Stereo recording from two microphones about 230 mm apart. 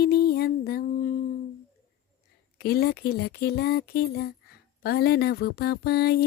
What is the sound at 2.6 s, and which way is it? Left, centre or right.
Music, left.